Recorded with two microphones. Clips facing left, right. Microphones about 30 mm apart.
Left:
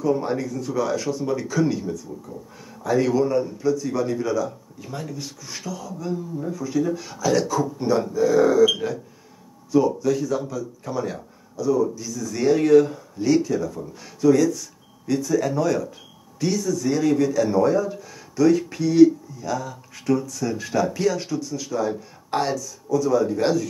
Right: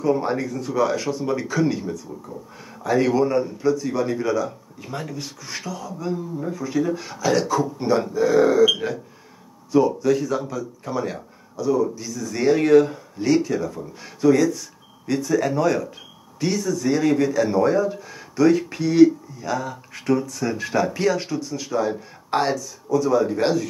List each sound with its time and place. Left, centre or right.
0.0 s speech: right